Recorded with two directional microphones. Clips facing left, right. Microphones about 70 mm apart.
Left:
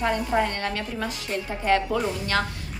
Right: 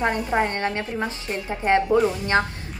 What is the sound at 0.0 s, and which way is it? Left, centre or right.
A woman's voice, right.